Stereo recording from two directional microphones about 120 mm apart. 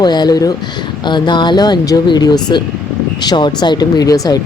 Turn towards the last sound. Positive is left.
turn(degrees=30)  # may be behind; listen again after turning